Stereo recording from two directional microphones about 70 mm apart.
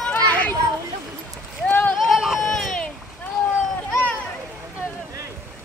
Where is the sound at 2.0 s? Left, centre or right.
Centre.